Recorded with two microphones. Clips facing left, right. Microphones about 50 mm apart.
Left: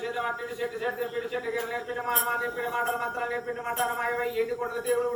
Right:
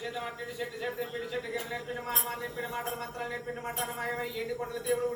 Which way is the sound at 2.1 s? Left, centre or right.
Left.